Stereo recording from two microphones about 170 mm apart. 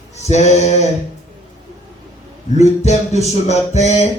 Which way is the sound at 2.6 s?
40° left (ahead or behind).